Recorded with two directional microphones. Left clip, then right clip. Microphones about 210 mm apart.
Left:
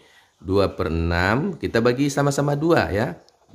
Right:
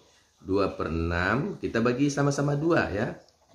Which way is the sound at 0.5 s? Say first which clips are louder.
Left 6 dB; 50° left (ahead or behind).